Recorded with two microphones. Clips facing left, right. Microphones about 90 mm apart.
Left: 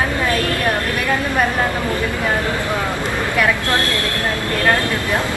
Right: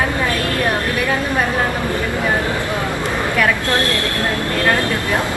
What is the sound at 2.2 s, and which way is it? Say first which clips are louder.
Speech: right 1 dB; 20° right (ahead or behind).